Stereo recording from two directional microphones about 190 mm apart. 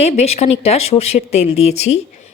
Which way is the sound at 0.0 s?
35° left (ahead or behind).